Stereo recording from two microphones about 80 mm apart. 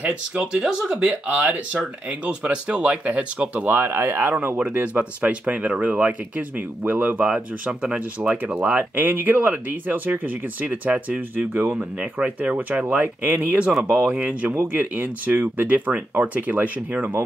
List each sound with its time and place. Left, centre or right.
0.0 s speech: centre
4.6 s speech: centre
7.2 s speech: centre